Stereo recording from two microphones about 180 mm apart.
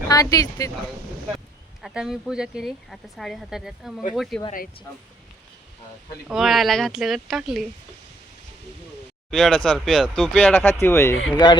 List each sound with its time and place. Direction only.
0.1 s speech: 20° left (ahead or behind)
1.8 s speech: 5° right (ahead or behind)
6.2 s speech: centre (ahead or behind)
9.3 s speech: centre (ahead or behind); by 11.6 s 25° left (ahead or behind)